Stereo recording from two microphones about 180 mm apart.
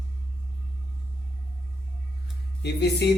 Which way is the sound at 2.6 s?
65° left (ahead or behind).